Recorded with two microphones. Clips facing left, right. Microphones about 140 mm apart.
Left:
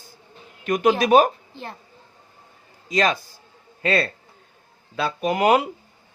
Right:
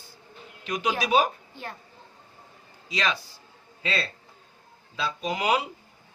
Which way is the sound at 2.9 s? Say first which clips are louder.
Left 7 dB; 45° left (ahead or behind).